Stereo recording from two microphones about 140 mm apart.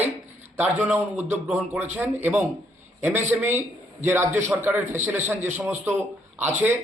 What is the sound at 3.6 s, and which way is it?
A man's voice, 15° right (ahead or behind).